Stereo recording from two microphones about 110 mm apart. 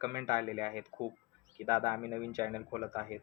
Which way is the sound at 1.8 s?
40° right (ahead or behind).